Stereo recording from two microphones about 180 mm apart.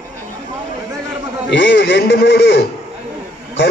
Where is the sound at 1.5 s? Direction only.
90° left.